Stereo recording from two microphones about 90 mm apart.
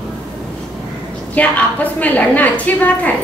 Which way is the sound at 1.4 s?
15° left (ahead or behind).